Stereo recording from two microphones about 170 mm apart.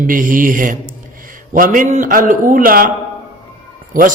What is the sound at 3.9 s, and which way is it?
Speech, 55° right (ahead or behind).